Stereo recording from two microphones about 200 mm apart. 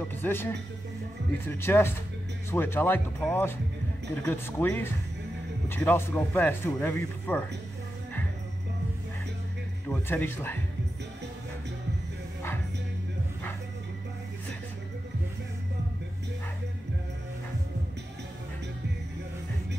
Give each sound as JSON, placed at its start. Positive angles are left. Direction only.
{"t": 0.2, "sound": "speech", "side_deg": 10}
{"t": 9.8, "sound": "speech", "side_deg": 10}